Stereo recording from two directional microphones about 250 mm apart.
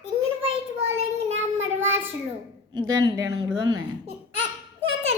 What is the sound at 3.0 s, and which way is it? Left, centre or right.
Speech, centre.